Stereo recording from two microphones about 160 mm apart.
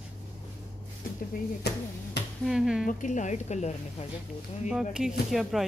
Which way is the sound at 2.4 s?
5° right (ahead or behind).